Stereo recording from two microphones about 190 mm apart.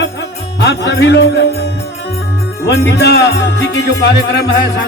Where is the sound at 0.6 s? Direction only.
65° left (ahead or behind).